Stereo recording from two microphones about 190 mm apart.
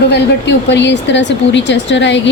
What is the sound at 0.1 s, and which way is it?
A woman's voice, 65° left (ahead or behind).